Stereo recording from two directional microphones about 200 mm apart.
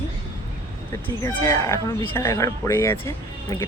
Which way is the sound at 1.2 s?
15° left (ahead or behind).